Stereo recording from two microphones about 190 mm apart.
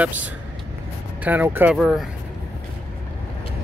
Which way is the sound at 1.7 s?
Centre (ahead or behind).